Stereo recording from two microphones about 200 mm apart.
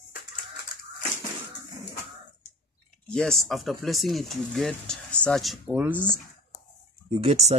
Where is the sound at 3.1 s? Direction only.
Centre (ahead or behind).